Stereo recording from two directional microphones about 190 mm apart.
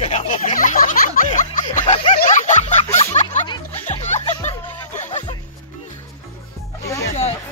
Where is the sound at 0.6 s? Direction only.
45° left (ahead or behind).